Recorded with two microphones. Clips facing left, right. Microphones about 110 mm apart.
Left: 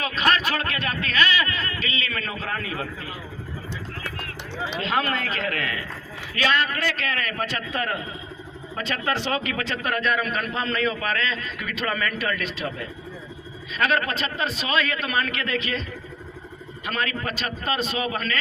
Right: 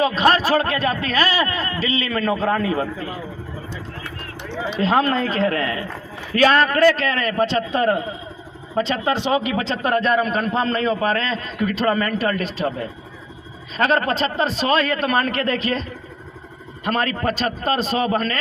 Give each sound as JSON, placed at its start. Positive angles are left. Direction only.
{"t": 0.0, "sound": "a man's voice", "side_deg": -35}
{"t": 4.8, "sound": "a man's voice", "side_deg": -35}